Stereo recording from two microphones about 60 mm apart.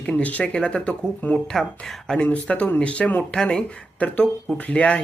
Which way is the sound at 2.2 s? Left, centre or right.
Left.